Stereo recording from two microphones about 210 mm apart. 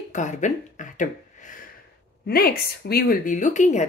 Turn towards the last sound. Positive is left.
turn(degrees=35)  # may be behind; listen again after turning